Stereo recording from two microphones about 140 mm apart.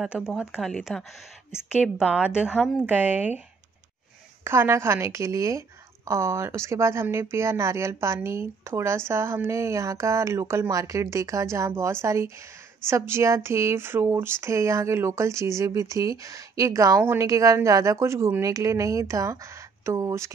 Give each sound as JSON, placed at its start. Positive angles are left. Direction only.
{"t": 0.0, "sound": "speech", "side_deg": -5}
{"t": 2.0, "sound": "a woman's voice", "side_deg": -5}
{"t": 4.5, "sound": "a woman's voice", "side_deg": -20}